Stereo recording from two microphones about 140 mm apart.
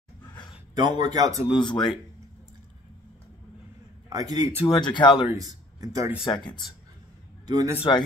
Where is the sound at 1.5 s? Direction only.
35° left (ahead or behind).